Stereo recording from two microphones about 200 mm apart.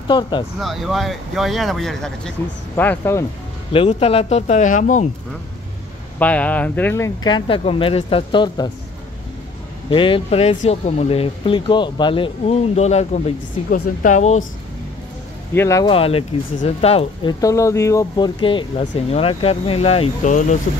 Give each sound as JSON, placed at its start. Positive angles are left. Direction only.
{"t": 0.1, "sound": "speech", "side_deg": 25}
{"t": 0.6, "sound": "speech", "side_deg": 0}
{"t": 3.7, "sound": "speech", "side_deg": 30}
{"t": 6.1, "sound": "speech", "side_deg": 5}
{"t": 7.2, "sound": "speech", "side_deg": 25}
{"t": 9.8, "sound": "speech", "side_deg": 25}
{"t": 15.5, "sound": "speech", "side_deg": 15}
{"t": 15.9, "sound": "speech", "side_deg": 30}